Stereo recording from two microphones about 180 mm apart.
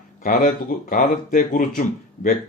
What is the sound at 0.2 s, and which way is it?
Speech, 50° left (ahead or behind).